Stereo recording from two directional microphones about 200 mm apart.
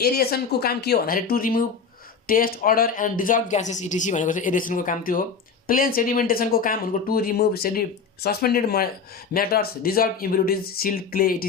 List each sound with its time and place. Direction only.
0.0 s speech: 50° left (ahead or behind)